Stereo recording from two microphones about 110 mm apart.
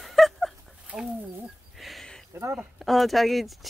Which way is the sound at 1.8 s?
Centre (ahead or behind).